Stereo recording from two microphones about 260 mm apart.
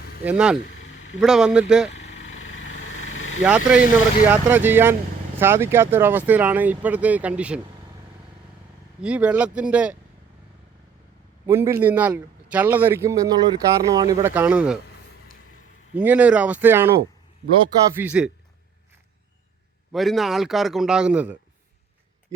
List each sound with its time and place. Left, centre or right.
0.3 s a man's voice: centre
2.0 s lawn mower: left
3.4 s a man's voice: centre
9.0 s a man's voice: centre
11.4 s a man's voice: centre
16.0 s a man's voice: centre
17.9 s a man's voice: centre
19.9 s a man's voice: centre